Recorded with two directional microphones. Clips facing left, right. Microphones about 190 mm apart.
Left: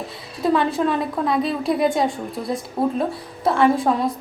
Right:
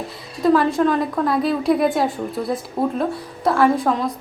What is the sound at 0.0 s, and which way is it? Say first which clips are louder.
A woman's voice: right 3 dB; centre (ahead or behind).